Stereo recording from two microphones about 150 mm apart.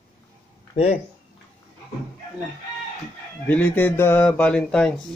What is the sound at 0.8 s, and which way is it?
Speech, 40° left (ahead or behind).